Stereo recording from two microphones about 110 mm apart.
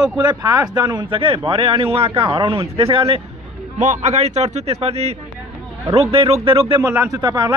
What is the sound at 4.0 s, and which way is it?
A man's voice, 85° right.